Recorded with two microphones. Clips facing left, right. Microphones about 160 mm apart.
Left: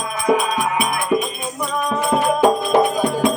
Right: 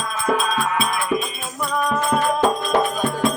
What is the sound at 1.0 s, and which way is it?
Music, centre (ahead or behind).